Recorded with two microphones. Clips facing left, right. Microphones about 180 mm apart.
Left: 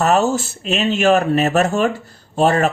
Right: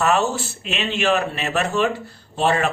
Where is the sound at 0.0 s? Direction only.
40° left (ahead or behind).